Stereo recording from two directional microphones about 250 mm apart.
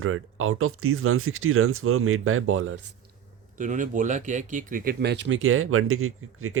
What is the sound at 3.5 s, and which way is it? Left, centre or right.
Speech, right.